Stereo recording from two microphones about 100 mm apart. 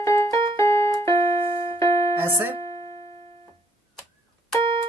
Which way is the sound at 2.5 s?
85° right.